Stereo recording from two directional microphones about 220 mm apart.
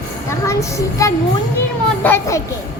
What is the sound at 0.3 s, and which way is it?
A child's voice, 15° left (ahead or behind).